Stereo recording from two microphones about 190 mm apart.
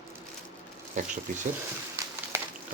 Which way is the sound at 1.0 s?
40° right (ahead or behind).